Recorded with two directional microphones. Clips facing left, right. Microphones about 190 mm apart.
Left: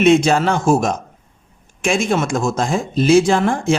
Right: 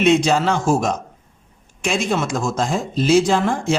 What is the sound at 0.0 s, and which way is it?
Speech, 50° left (ahead or behind).